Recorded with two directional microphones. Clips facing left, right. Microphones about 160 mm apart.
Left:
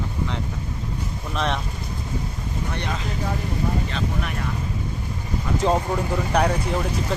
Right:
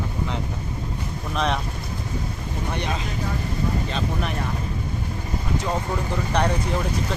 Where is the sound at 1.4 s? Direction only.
Centre (ahead or behind).